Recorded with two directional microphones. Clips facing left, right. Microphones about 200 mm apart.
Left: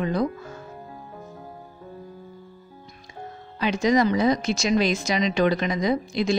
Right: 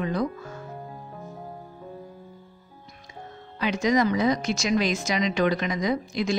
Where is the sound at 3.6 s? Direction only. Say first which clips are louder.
Left 2 dB; 30° left (ahead or behind).